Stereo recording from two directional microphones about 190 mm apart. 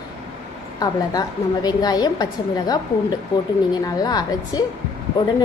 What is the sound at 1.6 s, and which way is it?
Speech, 20° left (ahead or behind).